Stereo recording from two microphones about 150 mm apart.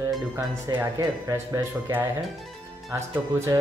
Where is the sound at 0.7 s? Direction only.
20° right (ahead or behind).